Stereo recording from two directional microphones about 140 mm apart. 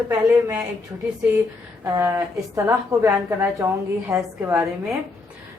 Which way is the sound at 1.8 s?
20° right (ahead or behind).